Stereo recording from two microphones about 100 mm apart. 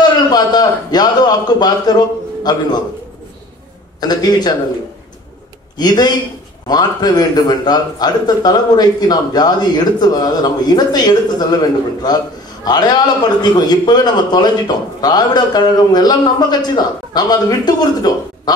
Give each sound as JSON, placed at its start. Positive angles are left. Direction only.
{"t": 0.0, "sound": "a man's voice", "side_deg": 45}
{"t": 4.0, "sound": "a man's voice", "side_deg": 40}
{"t": 5.8, "sound": "a man's voice", "side_deg": 45}